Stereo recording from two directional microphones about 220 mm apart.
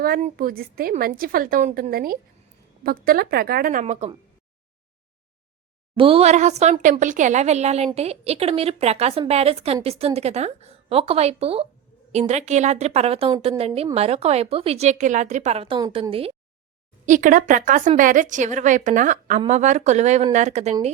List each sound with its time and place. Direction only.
0.0 s a woman's voice: 40° right (ahead or behind)
6.0 s a woman's voice: 25° right (ahead or behind)
17.1 s a woman's voice: 35° right (ahead or behind)